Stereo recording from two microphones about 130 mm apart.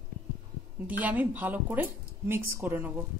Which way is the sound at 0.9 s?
10° right (ahead or behind).